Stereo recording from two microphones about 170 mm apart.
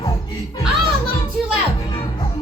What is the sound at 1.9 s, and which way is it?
Music, 25° left (ahead or behind).